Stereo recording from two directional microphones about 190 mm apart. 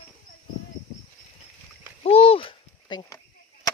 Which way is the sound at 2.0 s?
30° left (ahead or behind).